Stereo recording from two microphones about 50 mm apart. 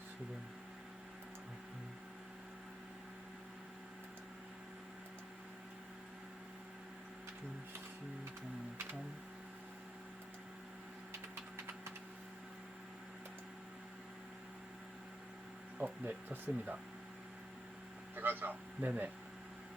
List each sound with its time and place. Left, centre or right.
15.8 s speech: right
18.2 s speech: right